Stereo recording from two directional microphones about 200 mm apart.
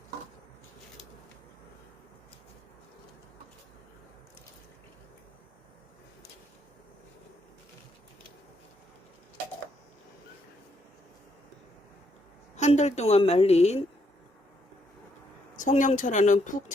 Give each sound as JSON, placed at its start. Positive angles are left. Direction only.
{"t": 12.5, "sound": "a woman's voice", "side_deg": 35}
{"t": 15.5, "sound": "a woman's voice", "side_deg": 40}